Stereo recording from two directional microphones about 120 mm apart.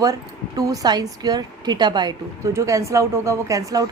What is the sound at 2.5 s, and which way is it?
Speech, 25° right (ahead or behind).